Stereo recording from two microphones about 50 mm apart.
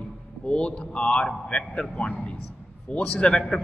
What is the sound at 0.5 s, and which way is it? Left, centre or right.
A man's voice, left.